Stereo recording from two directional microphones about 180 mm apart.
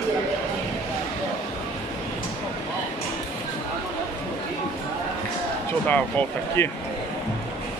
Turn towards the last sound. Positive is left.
turn(degrees=10)  # may be behind; listen again after turning